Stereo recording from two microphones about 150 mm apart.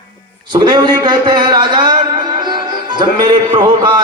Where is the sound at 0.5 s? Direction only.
30° right (ahead or behind).